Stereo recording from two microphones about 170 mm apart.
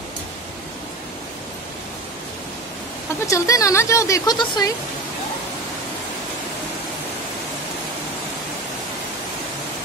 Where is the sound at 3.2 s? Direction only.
20° left (ahead or behind).